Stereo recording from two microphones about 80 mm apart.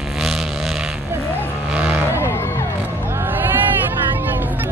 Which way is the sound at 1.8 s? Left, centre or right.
Right.